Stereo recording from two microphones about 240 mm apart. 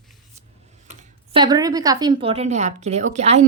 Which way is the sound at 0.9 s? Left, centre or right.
Right.